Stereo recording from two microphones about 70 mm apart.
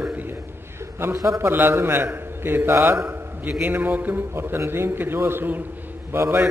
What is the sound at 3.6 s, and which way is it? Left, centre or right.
A man's voice, right.